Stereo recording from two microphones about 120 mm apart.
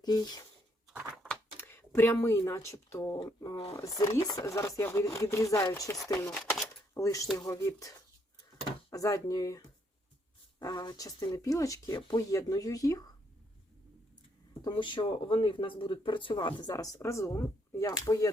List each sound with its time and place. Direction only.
0.0 s speech: 35° left (ahead or behind)
1.5 s a sound: 20° left (ahead or behind)
2.5 s speech: 25° left (ahead or behind)
8.9 s speech: 30° left (ahead or behind)
14.6 s speech: 40° left (ahead or behind)